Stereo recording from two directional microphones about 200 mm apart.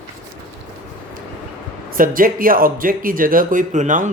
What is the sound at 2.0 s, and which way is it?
Speech, 45° right (ahead or behind).